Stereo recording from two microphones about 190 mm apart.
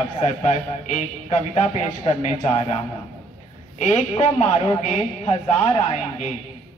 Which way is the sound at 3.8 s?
35° left (ahead or behind).